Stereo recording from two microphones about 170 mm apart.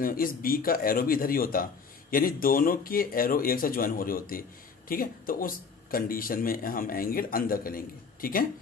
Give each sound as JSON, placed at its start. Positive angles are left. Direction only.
{"t": 0.0, "sound": "speech", "side_deg": 55}